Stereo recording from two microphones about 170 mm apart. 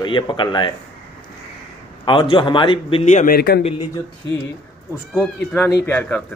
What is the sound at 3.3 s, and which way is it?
Speech, 65° left (ahead or behind).